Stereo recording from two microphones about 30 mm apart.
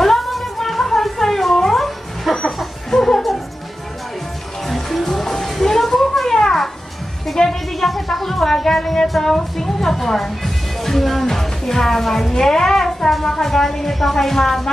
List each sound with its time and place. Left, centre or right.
0.0 s music: centre
2.9 s laughter: centre
4.6 s music: centre
6.3 s cat: centre
7.3 s music: centre
10.4 s a woman's voice: centre